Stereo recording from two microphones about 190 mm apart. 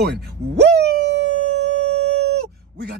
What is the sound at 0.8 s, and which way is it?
Howl, 65° right (ahead or behind).